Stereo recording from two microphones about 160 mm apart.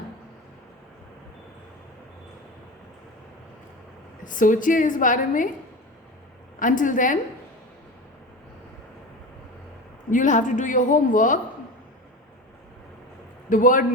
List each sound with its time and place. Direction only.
4.2 s a woman's voice: 55° left (ahead or behind)
6.6 s a woman's voice: 55° left (ahead or behind)
10.1 s a woman's voice: 50° left (ahead or behind)
13.5 s a woman's voice: 55° left (ahead or behind)